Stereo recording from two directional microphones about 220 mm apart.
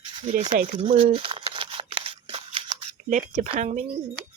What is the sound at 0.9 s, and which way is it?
Scissors, 25° right (ahead or behind).